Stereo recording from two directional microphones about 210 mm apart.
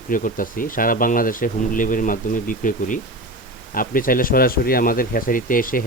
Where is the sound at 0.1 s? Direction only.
40° left (ahead or behind).